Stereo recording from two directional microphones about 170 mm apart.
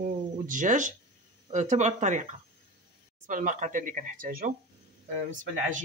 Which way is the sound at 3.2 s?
50° right (ahead or behind).